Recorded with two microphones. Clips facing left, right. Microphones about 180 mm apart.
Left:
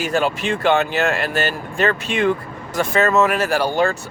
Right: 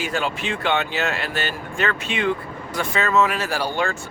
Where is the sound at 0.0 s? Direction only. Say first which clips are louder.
Left 5 dB; 45° left (ahead or behind).